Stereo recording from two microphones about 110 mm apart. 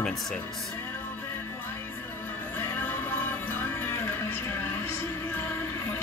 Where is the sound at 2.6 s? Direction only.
20° left (ahead or behind).